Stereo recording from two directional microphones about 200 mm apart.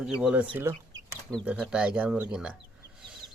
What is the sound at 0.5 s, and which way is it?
Chicken, 15° right (ahead or behind).